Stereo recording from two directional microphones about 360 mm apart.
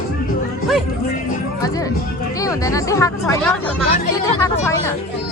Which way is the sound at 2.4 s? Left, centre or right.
Centre.